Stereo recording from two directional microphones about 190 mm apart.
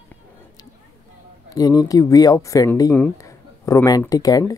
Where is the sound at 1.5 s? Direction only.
20° left (ahead or behind).